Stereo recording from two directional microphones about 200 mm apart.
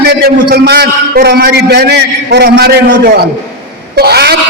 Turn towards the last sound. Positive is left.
turn(degrees=-55)  # may be behind; listen again after turning